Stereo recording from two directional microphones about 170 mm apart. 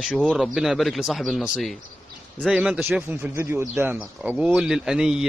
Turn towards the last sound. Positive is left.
turn(degrees=-5)  # may be behind; listen again after turning